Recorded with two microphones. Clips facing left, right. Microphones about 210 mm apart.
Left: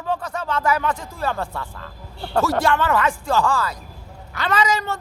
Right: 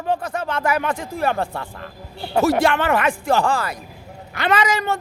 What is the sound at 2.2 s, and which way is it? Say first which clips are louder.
Speech: right 3 dB; 15° right (ahead or behind).